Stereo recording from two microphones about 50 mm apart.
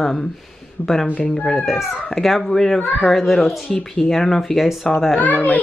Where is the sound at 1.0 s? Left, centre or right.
Left.